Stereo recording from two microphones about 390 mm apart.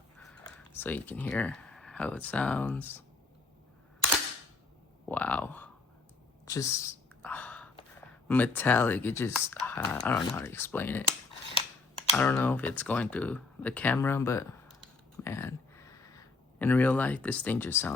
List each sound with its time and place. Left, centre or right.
0.2 s speech: centre
5.0 s speech: centre
6.4 s whispering: centre
8.3 s speech: centre
12.1 s speech: centre
15.2 s a sound: centre